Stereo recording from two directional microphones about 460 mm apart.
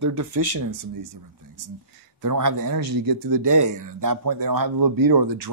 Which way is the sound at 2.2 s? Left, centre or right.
Right.